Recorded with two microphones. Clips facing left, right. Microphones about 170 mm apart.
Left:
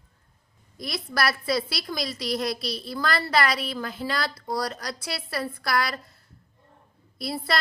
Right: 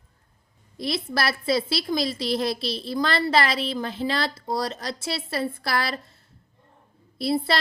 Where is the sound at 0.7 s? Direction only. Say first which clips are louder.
Right 3 dB; 25° right (ahead or behind).